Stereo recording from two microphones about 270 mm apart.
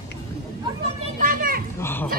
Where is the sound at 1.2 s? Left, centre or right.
Right.